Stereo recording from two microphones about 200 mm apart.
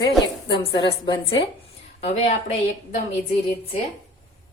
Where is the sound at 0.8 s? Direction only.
25° left (ahead or behind).